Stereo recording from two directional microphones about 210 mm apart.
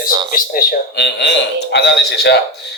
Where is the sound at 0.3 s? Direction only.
45° left (ahead or behind).